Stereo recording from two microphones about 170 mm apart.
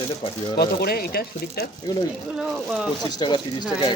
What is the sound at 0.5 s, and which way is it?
Speech, 65° left (ahead or behind).